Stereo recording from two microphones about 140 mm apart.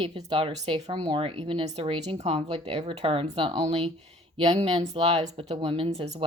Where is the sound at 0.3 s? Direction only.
40° right (ahead or behind).